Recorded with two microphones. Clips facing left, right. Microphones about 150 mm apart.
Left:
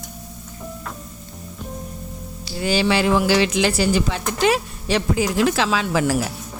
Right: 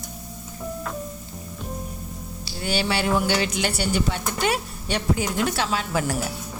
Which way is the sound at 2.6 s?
90° left.